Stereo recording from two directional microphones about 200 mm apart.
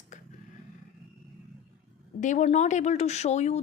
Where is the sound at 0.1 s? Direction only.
40° left (ahead or behind).